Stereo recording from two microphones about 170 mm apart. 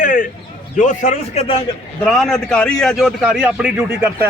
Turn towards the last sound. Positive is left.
turn(degrees=-5)  # may be behind; listen again after turning